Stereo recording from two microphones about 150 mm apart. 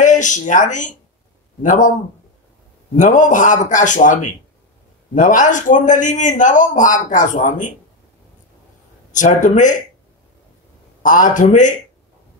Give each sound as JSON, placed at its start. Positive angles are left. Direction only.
{"t": 0.0, "sound": "a man's voice", "side_deg": 55}
{"t": 3.0, "sound": "a man's voice", "side_deg": 55}
{"t": 9.1, "sound": "a man's voice", "side_deg": 55}
{"t": 11.0, "sound": "a man's voice", "side_deg": 60}